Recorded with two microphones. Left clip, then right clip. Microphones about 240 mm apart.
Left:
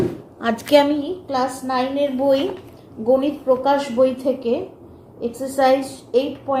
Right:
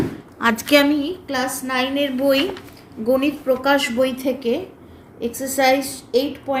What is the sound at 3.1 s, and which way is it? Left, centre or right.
A woman's voice, right.